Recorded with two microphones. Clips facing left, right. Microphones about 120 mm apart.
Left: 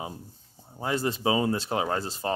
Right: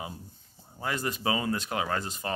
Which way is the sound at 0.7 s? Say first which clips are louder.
Left 4 dB; 25° left (ahead or behind).